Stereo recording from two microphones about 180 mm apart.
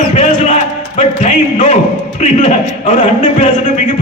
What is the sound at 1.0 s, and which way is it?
A man's voice, 35° left (ahead or behind).